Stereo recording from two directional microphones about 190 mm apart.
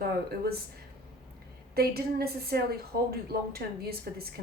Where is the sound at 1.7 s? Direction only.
55° right (ahead or behind).